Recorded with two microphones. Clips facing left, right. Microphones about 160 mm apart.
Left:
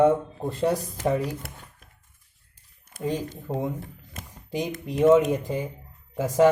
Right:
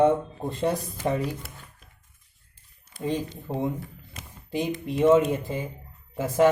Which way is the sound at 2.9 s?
55° left (ahead or behind).